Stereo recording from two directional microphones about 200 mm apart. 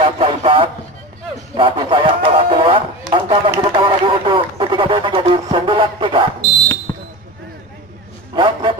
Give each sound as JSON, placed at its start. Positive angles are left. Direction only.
{"t": 0.0, "sound": "a sound", "side_deg": -25}
{"t": 3.1, "sound": "chop", "side_deg": -25}
{"t": 3.6, "sound": "radio", "side_deg": -25}
{"t": 6.9, "sound": "basketball bounce", "side_deg": 15}
{"t": 8.4, "sound": "vehicle", "side_deg": -25}